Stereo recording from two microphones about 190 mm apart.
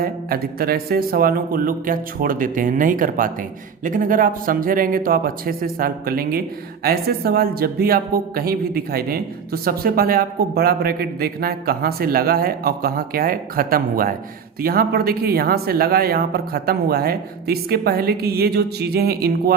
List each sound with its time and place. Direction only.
0.0 s speech: 50° right (ahead or behind)